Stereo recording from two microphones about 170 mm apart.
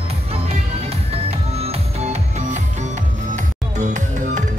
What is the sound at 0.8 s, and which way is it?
Music, 35° right (ahead or behind).